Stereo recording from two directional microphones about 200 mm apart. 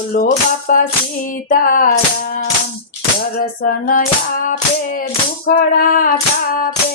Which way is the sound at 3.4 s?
40° left (ahead or behind).